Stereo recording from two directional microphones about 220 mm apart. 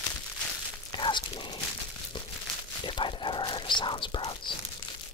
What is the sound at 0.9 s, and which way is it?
Whispering, 20° left (ahead or behind).